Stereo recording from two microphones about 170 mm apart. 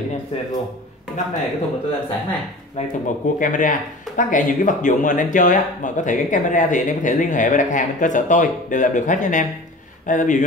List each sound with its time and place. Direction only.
3.3 s speech: 50° left (ahead or behind)